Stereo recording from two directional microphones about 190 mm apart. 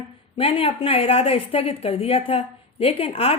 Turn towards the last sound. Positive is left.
turn(degrees=30)  # may be behind; listen again after turning